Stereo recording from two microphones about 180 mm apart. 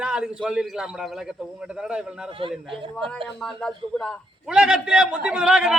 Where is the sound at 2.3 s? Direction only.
30° right (ahead or behind).